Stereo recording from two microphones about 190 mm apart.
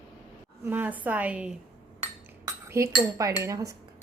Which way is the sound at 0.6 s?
10° right (ahead or behind).